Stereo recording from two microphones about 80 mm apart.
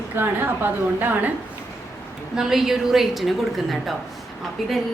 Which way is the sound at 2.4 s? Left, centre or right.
Centre.